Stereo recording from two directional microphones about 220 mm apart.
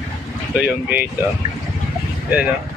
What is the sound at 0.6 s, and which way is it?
Speech, 5° right (ahead or behind).